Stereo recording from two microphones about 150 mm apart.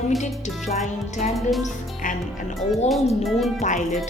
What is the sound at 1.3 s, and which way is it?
Speech, centre (ahead or behind).